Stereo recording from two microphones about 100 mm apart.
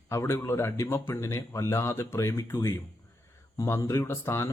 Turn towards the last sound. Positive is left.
turn(degrees=25)  # may be behind; listen again after turning